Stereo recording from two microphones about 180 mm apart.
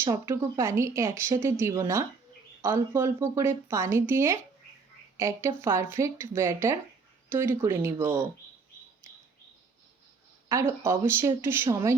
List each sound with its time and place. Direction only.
0.0 s speech: 15° right (ahead or behind)
10.5 s speech: 15° right (ahead or behind)